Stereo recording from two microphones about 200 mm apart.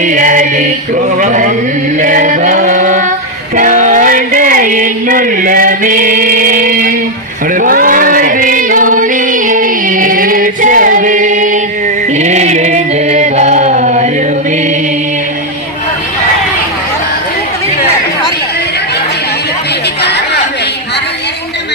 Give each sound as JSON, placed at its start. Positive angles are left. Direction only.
{"t": 0.0, "sound": "chant", "side_deg": -40}
{"t": 3.5, "sound": "a sound", "side_deg": -40}
{"t": 7.5, "sound": "music", "side_deg": -45}
{"t": 12.1, "sound": "chant", "side_deg": -35}
{"t": 20.0, "sound": "chatter", "side_deg": 55}